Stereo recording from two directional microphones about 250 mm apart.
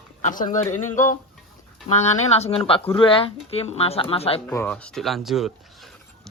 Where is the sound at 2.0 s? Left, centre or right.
Left.